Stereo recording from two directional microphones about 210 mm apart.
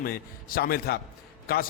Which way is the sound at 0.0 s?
45° left (ahead or behind).